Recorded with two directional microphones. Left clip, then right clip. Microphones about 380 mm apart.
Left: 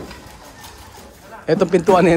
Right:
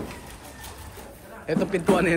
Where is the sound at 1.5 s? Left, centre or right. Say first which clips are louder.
Left 9 dB; centre.